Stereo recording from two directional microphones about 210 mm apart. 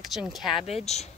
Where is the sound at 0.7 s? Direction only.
30° left (ahead or behind).